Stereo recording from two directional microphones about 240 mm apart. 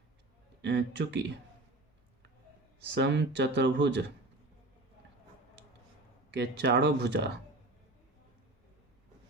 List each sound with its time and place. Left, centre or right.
0.6 s speech: right
2.9 s speech: right
6.3 s speech: right